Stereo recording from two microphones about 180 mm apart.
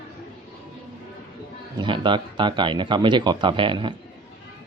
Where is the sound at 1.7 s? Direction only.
25° right (ahead or behind).